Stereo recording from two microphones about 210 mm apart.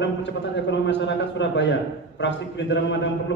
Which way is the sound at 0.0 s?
60° left (ahead or behind).